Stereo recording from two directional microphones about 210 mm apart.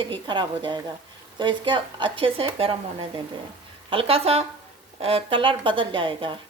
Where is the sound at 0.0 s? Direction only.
20° right (ahead or behind).